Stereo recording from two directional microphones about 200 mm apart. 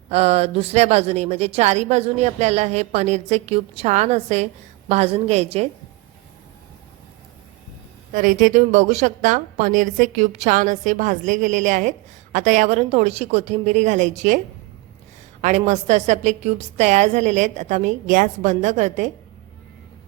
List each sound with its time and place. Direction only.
0.1 s a woman's voice: 30° right (ahead or behind)
8.1 s a woman's voice: 40° right (ahead or behind)